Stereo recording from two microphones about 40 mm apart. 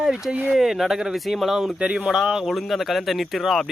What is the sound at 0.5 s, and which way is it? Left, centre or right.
Speech, centre.